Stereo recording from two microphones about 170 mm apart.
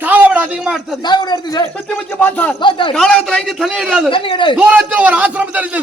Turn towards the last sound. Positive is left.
turn(degrees=-10)  # may be behind; listen again after turning